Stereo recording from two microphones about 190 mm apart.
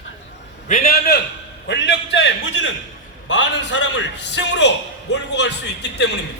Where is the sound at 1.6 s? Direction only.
70° left (ahead or behind).